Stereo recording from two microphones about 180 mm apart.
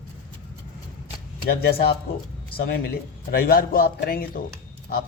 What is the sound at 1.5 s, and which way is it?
A man's voice, 60° left (ahead or behind).